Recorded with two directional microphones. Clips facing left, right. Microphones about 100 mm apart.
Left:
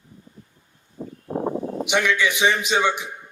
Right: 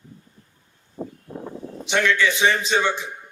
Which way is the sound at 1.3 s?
50° left (ahead or behind).